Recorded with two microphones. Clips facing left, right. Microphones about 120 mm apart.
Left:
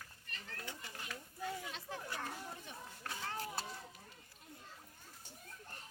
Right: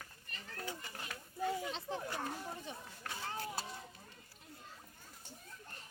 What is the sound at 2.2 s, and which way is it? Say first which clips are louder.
Children playing: right 3 dB; 15° right (ahead or behind).